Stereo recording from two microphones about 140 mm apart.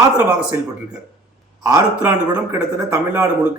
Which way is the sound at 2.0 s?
15° right (ahead or behind).